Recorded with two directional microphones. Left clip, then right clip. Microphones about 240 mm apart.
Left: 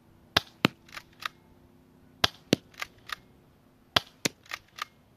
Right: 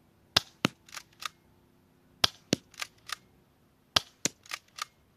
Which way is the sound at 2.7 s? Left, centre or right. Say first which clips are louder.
Left 1 dB; right.